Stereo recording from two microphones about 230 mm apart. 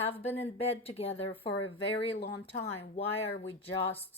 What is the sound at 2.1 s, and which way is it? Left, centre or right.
Speech, left.